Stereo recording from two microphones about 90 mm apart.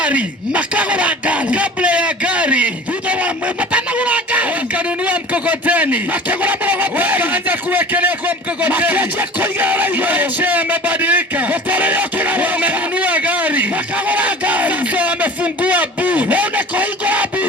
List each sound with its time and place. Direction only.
0.0 s speech: 15° right (ahead or behind)
3.7 s music: 15° right (ahead or behind)
5.0 s a sound: 15° right (ahead or behind)